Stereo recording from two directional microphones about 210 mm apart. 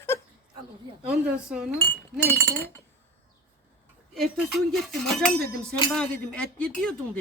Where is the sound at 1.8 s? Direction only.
10° left (ahead or behind).